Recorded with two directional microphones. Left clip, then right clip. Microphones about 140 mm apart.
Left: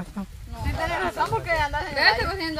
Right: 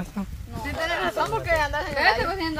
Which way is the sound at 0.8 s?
55° right (ahead or behind).